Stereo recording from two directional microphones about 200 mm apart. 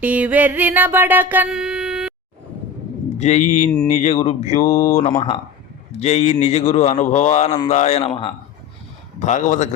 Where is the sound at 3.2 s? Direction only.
35° left (ahead or behind).